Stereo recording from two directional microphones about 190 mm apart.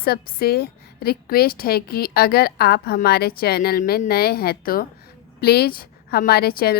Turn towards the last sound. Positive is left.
turn(degrees=55)  # may be behind; listen again after turning